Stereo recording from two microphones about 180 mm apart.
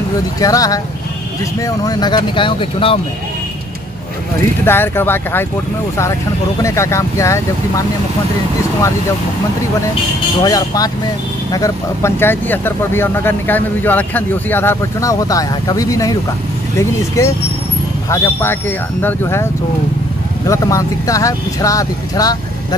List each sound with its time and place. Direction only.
0.4 s speech: 20° left (ahead or behind)
4.6 s speech: 10° left (ahead or behind)
6.6 s speech: 15° left (ahead or behind)
10.4 s speech: 20° left (ahead or behind)
20.4 s speech: 20° left (ahead or behind)